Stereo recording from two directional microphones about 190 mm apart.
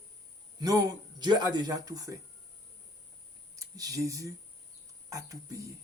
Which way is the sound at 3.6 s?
20° right (ahead or behind).